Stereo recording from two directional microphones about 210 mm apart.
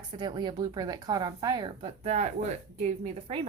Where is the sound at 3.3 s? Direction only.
25° right (ahead or behind).